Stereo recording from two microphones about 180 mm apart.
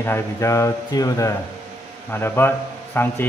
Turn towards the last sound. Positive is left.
turn(degrees=10)  # may be behind; listen again after turning